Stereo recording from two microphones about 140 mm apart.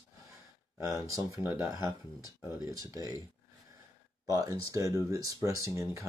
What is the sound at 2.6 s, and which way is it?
Speech, 25° right (ahead or behind).